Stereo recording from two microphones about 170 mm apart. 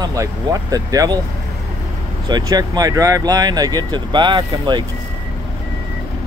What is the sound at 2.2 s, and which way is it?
Speech, 25° right (ahead or behind).